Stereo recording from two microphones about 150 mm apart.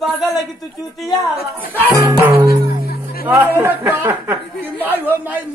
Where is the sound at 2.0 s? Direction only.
15° right (ahead or behind).